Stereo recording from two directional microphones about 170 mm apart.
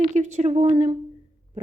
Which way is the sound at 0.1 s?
45° right (ahead or behind).